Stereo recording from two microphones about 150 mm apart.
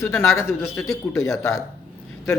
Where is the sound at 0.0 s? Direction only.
15° left (ahead or behind).